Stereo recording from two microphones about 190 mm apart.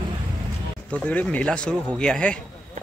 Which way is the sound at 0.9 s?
10° left (ahead or behind).